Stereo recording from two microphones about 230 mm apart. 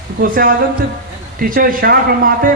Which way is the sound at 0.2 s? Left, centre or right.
Right.